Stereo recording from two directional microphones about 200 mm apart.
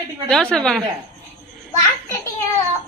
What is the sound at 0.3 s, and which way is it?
Speech, centre (ahead or behind).